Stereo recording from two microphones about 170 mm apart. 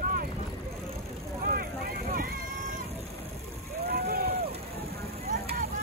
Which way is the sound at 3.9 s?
65° right (ahead or behind).